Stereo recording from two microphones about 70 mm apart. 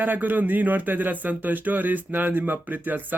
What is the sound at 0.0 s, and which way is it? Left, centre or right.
Speech, right.